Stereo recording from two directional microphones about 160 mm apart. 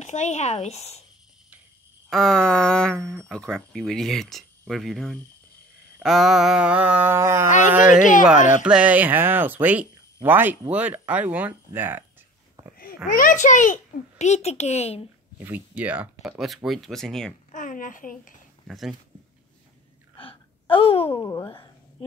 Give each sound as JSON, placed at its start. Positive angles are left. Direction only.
{"t": 0.0, "sound": "a child's voice", "side_deg": 50}
{"t": 2.0, "sound": "speech", "side_deg": 0}
{"t": 3.0, "sound": "speech", "side_deg": -20}
{"t": 3.3, "sound": "speech", "side_deg": 0}
{"t": 6.0, "sound": "a sound", "side_deg": 0}
{"t": 8.0, "sound": "a woman's voice", "side_deg": 55}
{"t": 8.6, "sound": "a sound", "side_deg": -5}
{"t": 13.1, "sound": "a child's voice", "side_deg": 55}
{"t": 15.3, "sound": "speech", "side_deg": -10}
{"t": 17.5, "sound": "a woman's voice", "side_deg": 55}
{"t": 18.7, "sound": "speech", "side_deg": 0}
{"t": 20.2, "sound": "gasp", "side_deg": 35}
{"t": 21.2, "sound": "speech", "side_deg": 25}